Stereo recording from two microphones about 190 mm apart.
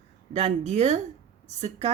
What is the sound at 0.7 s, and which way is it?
Speech, 35° right (ahead or behind).